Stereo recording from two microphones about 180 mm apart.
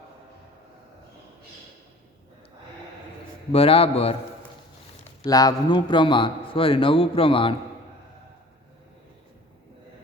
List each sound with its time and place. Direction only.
3.5 s a man's voice: 30° left (ahead or behind)
5.2 s speech: 20° left (ahead or behind)